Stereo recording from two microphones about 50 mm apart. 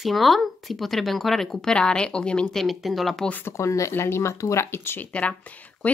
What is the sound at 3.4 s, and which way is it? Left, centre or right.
Speech, left.